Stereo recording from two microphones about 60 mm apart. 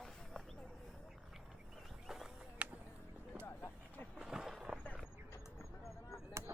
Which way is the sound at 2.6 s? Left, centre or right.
Right.